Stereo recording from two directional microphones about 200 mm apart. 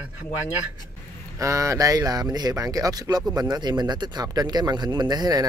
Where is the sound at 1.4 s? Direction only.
15° right (ahead or behind).